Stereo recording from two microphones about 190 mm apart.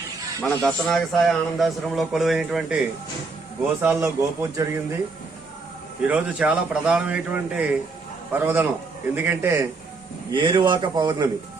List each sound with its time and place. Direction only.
0.6 s a man's voice: 5° left (ahead or behind)
3.8 s a man's voice: 10° right (ahead or behind)
6.1 s a man's voice: 5° right (ahead or behind)
10.3 s speech: 25° right (ahead or behind)